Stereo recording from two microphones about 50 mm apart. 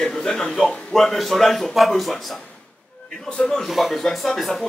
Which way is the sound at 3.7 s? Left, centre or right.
Centre.